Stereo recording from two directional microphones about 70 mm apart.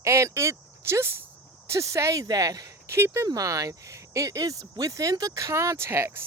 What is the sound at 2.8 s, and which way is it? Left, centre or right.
Speech, right.